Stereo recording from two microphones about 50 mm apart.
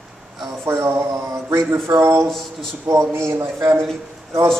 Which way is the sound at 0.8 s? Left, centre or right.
Right.